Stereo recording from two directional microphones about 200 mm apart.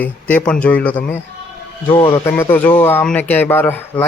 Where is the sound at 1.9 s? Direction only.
25° left (ahead or behind).